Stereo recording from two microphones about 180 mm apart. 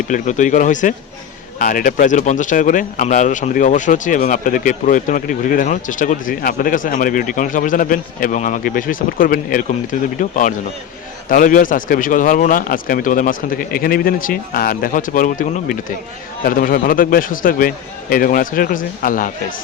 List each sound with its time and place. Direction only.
0.1 s speech: 45° left (ahead or behind)